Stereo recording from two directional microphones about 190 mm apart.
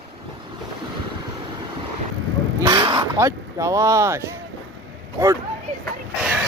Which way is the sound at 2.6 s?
20° right (ahead or behind).